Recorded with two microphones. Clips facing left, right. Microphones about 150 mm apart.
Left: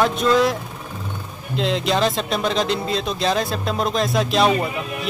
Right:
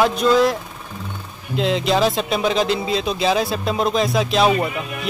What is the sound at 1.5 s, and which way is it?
Speech, centre (ahead or behind).